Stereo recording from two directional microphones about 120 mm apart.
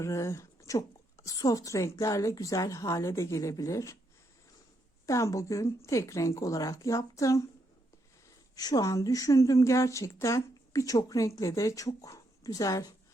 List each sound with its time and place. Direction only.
0.0 s a woman's voice: 25° left (ahead or behind)
5.0 s a woman's voice: 25° left (ahead or behind)
8.5 s a woman's voice: 30° left (ahead or behind)